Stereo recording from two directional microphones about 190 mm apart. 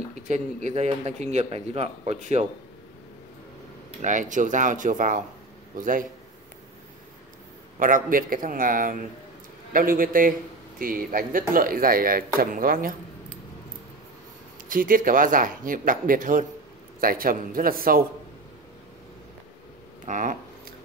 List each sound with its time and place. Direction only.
0.3 s a man's voice: 40° right (ahead or behind)
4.0 s speech: 40° right (ahead or behind)
7.8 s speech: 45° right (ahead or behind)
14.7 s speech: 45° right (ahead or behind)
20.1 s speech: 45° right (ahead or behind)